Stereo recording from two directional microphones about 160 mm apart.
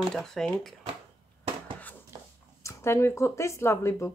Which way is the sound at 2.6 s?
15° left (ahead or behind).